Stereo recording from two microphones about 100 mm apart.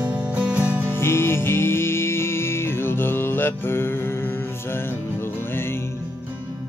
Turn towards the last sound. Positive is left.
turn(degrees=25)  # may be behind; listen again after turning